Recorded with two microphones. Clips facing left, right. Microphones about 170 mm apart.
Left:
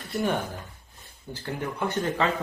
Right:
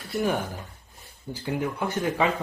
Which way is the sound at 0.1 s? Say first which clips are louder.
Right 1 dB; 5° right (ahead or behind).